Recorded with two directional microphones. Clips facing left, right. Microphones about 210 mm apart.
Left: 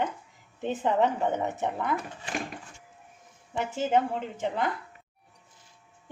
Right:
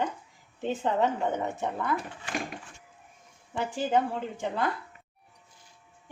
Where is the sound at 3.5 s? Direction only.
20° left (ahead or behind).